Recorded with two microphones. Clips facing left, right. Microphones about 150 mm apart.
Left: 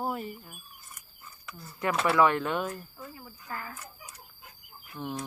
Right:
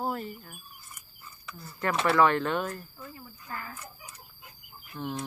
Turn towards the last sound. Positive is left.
turn(degrees=10)  # may be behind; listen again after turning